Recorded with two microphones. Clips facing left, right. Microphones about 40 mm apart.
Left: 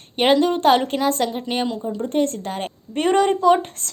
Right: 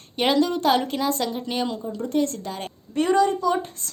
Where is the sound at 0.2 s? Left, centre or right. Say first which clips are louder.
Left 4 dB; left.